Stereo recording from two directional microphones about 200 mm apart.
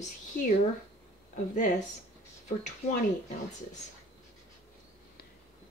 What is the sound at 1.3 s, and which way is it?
Speech, 40° left (ahead or behind).